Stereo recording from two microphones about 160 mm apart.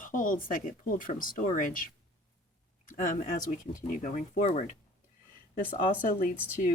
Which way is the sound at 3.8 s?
50° left (ahead or behind).